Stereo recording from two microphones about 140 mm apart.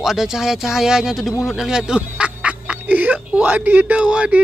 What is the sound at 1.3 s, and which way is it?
Speech, 20° left (ahead or behind).